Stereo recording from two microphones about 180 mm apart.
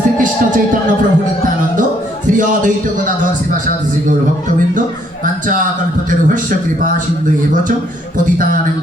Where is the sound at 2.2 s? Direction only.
45° right (ahead or behind).